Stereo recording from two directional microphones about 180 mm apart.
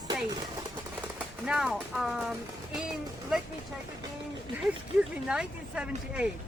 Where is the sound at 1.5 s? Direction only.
5° right (ahead or behind).